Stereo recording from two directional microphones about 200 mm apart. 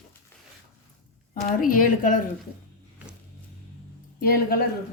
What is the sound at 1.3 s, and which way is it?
Speech, 40° left (ahead or behind).